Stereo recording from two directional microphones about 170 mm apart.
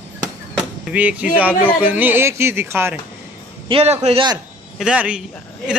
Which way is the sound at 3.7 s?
35° right (ahead or behind).